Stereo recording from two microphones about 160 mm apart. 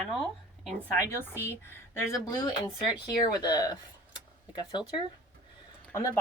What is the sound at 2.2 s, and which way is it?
Speech, 25° left (ahead or behind).